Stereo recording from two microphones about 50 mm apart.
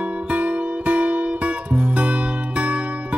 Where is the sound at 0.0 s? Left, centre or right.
Right.